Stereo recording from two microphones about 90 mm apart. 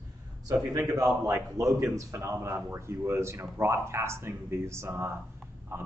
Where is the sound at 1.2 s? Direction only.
35° right (ahead or behind).